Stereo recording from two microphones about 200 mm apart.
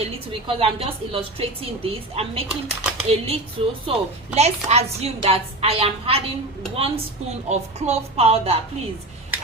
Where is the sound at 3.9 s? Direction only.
30° right (ahead or behind).